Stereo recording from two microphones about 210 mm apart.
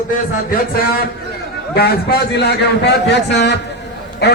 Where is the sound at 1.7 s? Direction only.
45° left (ahead or behind).